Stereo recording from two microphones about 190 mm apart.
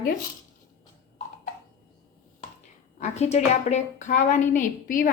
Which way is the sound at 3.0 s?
35° left (ahead or behind).